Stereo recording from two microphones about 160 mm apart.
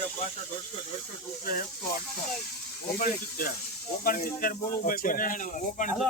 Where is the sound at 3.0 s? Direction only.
65° left (ahead or behind).